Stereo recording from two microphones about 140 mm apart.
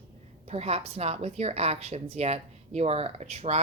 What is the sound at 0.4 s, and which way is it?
A woman's voice, 50° right (ahead or behind).